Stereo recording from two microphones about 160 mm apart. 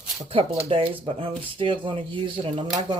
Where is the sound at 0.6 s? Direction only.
35° right (ahead or behind).